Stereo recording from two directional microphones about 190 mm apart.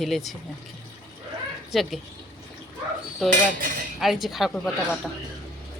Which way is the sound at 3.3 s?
45° right (ahead or behind).